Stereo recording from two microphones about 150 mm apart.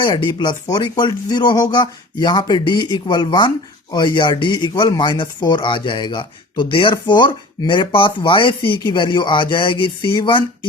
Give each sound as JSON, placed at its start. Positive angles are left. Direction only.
{"t": 0.0, "sound": "speech", "side_deg": 30}